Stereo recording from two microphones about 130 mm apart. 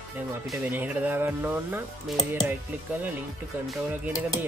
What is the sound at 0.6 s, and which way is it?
Speech, 10° right (ahead or behind).